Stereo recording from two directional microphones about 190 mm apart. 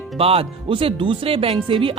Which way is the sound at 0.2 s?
30° right (ahead or behind).